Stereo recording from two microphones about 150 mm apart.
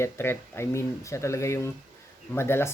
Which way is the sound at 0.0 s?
15° left (ahead or behind).